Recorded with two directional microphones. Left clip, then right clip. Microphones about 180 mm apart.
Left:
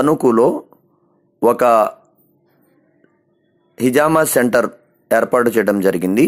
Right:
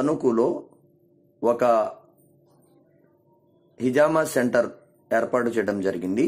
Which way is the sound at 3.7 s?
35° left (ahead or behind).